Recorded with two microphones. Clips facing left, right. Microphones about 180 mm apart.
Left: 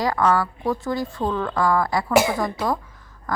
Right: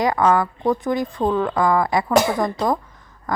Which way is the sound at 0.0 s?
20° right (ahead or behind).